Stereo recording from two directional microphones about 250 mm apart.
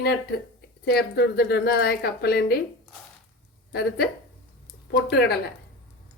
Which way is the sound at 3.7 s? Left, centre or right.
Left.